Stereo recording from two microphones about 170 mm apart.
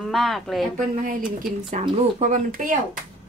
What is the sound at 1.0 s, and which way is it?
Speech, 55° right (ahead or behind).